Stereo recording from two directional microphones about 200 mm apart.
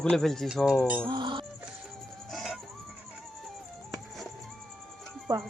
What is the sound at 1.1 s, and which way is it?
Speech, 25° right (ahead or behind).